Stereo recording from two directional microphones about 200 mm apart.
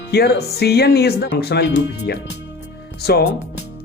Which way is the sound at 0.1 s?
55° left (ahead or behind).